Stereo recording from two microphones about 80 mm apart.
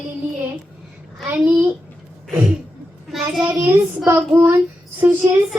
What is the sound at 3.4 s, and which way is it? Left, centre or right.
A child's voice, right.